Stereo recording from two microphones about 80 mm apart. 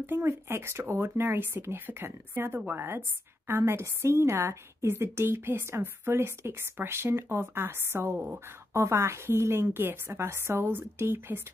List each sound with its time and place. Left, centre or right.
0.0 s a woman's voice: right